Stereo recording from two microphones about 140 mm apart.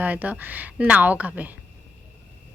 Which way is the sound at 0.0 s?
10° right (ahead or behind).